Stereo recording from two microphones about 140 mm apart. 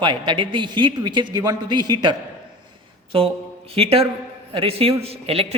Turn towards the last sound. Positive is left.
turn(degrees=-45)  # may be behind; listen again after turning